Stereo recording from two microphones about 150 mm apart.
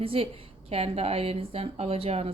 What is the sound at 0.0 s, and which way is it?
A woman's voice, 40° right (ahead or behind).